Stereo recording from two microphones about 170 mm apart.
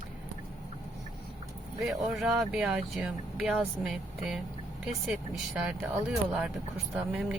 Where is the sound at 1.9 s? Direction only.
Centre (ahead or behind).